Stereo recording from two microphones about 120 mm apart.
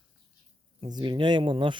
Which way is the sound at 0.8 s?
40° right (ahead or behind).